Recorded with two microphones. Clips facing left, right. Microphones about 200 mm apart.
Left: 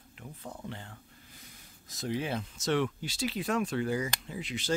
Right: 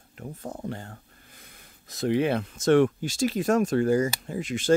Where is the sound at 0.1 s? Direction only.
45° right (ahead or behind).